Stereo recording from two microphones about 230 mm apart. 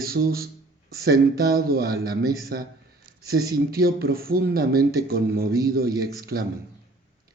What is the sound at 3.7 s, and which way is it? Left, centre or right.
Speech, right.